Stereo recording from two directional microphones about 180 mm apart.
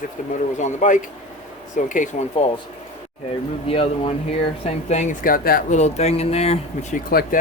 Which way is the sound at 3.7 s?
30° left (ahead or behind).